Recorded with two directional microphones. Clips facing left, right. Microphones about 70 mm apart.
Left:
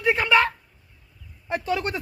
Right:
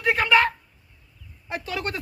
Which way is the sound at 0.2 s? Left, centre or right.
Centre.